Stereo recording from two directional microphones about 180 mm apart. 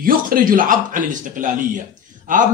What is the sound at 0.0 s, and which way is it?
Speech, 55° right (ahead or behind).